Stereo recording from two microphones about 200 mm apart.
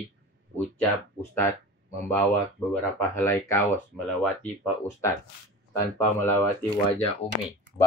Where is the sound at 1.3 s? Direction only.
10° left (ahead or behind).